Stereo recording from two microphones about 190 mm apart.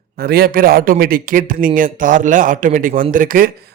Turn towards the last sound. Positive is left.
turn(degrees=-45)  # may be behind; listen again after turning